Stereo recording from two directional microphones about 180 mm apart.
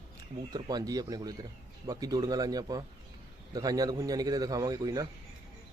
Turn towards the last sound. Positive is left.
turn(degrees=-20)  # may be behind; listen again after turning